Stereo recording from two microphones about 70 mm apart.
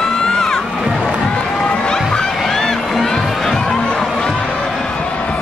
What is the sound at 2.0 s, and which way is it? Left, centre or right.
Music, centre.